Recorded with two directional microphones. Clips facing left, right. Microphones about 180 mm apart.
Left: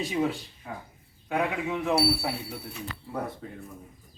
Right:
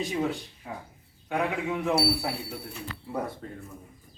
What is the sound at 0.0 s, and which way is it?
Speech, centre (ahead or behind).